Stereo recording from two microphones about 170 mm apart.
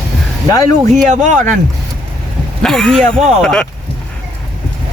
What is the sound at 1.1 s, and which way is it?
Speech, 45° right (ahead or behind).